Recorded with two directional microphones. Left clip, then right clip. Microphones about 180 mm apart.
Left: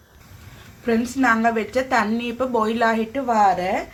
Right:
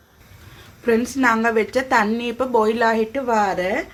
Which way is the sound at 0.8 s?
30° right (ahead or behind).